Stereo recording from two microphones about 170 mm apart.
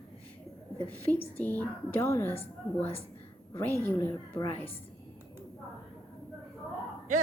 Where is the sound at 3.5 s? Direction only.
15° left (ahead or behind).